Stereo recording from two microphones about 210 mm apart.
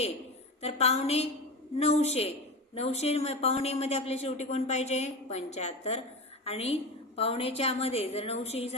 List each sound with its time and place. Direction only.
0.6 s a woman's voice: 30° left (ahead or behind)